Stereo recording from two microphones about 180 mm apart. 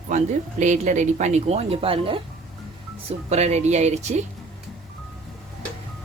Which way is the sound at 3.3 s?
35° right (ahead or behind).